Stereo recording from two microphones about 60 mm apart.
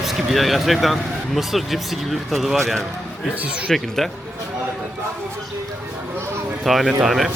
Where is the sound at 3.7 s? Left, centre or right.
Centre.